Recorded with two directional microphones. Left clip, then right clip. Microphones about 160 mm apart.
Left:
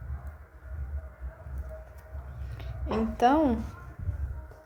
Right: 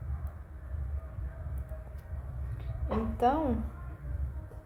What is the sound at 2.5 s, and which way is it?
Speech, 50° left (ahead or behind).